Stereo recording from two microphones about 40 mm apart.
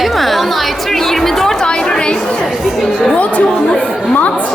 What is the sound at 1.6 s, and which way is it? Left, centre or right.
Chatter, centre.